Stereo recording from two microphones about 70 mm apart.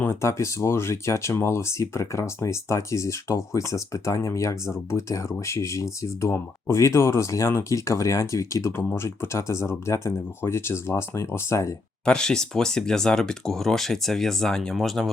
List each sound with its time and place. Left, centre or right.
0.1 s speech: left
12.0 s speech: centre